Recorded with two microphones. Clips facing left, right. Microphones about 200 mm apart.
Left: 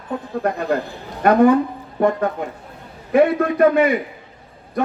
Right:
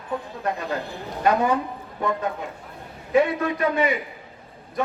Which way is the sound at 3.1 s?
55° left (ahead or behind).